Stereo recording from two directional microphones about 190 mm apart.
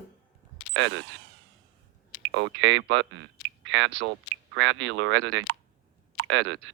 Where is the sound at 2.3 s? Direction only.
75° right (ahead or behind).